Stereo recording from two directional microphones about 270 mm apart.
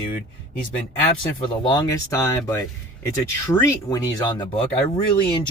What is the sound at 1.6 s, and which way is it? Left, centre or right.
Speech, centre.